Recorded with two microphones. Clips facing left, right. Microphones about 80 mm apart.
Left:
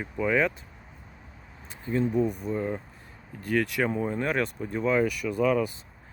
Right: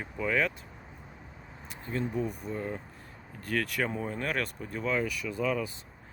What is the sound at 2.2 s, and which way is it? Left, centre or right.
Speech, left.